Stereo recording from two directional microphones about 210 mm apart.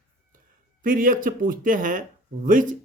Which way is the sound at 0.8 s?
40° right (ahead or behind).